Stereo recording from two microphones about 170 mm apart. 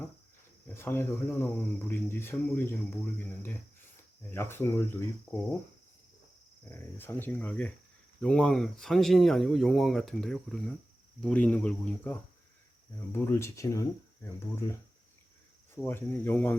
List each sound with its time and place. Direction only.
0.7 s speech: 15° left (ahead or behind)
4.3 s speech: 15° left (ahead or behind)
6.7 s speech: 10° left (ahead or behind)